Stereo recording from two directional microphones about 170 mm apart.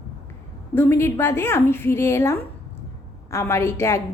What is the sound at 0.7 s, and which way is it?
A woman's voice, 15° left (ahead or behind).